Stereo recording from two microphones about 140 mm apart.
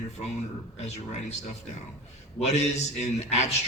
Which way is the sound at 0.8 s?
50° left (ahead or behind).